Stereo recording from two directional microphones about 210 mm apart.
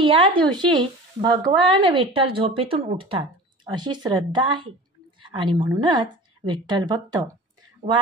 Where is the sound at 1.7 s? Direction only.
25° right (ahead or behind).